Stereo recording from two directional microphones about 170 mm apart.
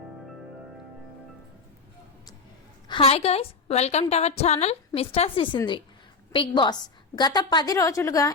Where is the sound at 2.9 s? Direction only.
35° left (ahead or behind).